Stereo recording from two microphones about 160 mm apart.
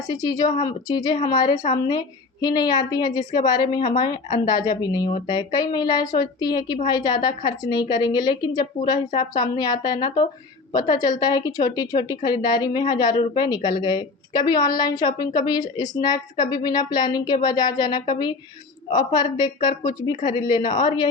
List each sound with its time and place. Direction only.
0.1 s a woman's voice: 25° left (ahead or behind)